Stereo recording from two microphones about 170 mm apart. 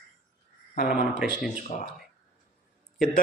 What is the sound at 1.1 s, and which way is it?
Speech, 5° right (ahead or behind).